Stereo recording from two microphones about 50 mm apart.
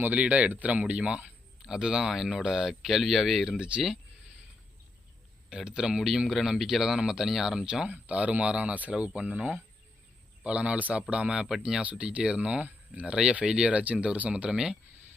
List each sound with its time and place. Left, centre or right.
0.0 s speech: right; by 3.6 s centre
3.6 s speech: centre
5.5 s speech: centre
7.9 s speech: right; by 11.8 s centre
11.8 s speech: right
14.5 s speech: centre